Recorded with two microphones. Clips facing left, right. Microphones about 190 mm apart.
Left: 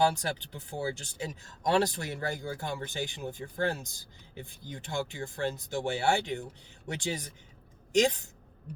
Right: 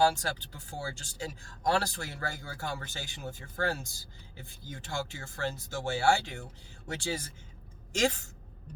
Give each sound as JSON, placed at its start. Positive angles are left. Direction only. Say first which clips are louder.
{"t": 0.0, "sound": "speech", "louder": "even", "side_deg": 20}